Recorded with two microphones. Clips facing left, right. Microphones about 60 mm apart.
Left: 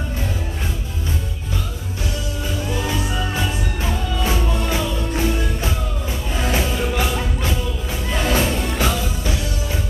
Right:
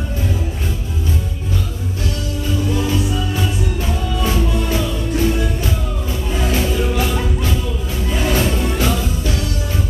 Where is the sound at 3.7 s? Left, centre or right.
Left.